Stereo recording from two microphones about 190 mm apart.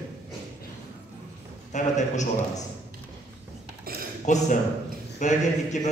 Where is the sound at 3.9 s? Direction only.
50° right (ahead or behind).